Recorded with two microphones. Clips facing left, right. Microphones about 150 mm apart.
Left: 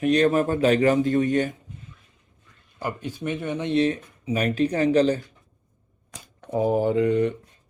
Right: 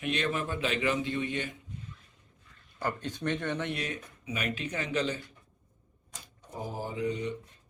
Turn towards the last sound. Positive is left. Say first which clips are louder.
# left 12 dB
turn(degrees=60)  # may be behind; listen again after turning